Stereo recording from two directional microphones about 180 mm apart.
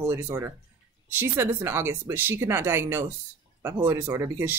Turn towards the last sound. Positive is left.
turn(degrees=-15)  # may be behind; listen again after turning